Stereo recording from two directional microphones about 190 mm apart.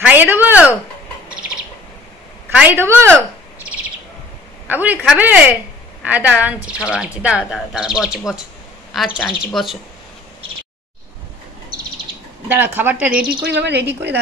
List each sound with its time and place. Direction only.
0.0 s a woman's voice: 10° right (ahead or behind)
2.5 s a woman's voice: 10° right (ahead or behind)
4.6 s a woman's voice: 10° right (ahead or behind)
12.4 s a woman's voice: 10° right (ahead or behind)
13.2 s speech: 60° right (ahead or behind)